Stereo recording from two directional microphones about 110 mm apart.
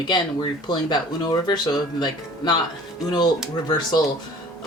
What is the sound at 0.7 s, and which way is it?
Speech, 40° left (ahead or behind).